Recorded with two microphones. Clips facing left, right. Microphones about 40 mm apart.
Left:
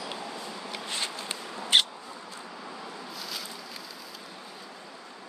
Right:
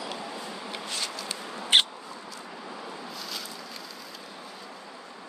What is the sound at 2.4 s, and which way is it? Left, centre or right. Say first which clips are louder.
Vehicle: right 2 dB; centre.